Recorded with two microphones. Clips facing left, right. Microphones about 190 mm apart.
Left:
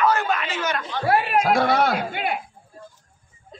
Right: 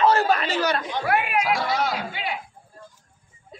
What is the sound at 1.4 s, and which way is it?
A man's voice, 55° left (ahead or behind).